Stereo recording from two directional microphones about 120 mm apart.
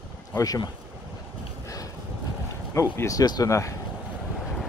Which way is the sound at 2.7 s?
25° left (ahead or behind).